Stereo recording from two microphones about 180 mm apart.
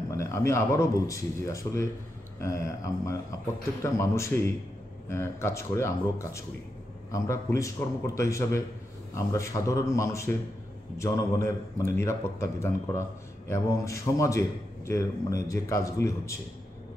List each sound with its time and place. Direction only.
0.1 s a man's voice: 15° left (ahead or behind)